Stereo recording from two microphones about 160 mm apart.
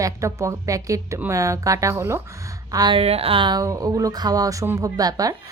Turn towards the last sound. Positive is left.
turn(degrees=-20)  # may be behind; listen again after turning